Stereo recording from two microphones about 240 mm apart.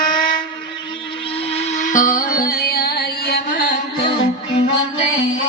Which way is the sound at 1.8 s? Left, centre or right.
Left.